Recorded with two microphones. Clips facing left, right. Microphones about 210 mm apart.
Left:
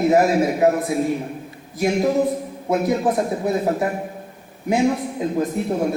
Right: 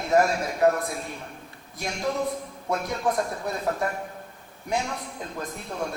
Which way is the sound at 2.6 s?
20° left (ahead or behind).